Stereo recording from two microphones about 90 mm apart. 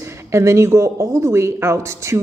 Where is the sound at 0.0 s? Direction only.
30° right (ahead or behind).